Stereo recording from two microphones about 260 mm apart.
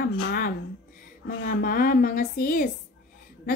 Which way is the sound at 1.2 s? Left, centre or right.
Left.